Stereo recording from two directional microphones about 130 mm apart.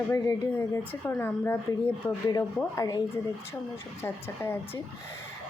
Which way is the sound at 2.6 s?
30° left (ahead or behind).